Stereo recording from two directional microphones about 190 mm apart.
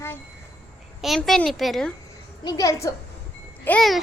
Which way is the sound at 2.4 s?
20° left (ahead or behind).